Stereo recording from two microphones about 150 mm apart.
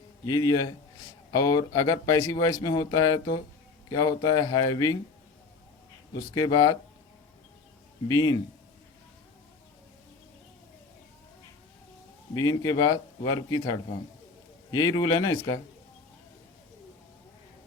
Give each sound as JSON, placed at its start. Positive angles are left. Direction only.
{"t": 0.3, "sound": "speech", "side_deg": 25}
{"t": 6.1, "sound": "speech", "side_deg": 20}
{"t": 8.0, "sound": "speech", "side_deg": 25}
{"t": 12.3, "sound": "speech", "side_deg": 25}